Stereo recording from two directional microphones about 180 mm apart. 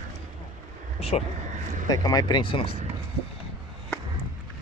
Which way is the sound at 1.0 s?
35° left (ahead or behind).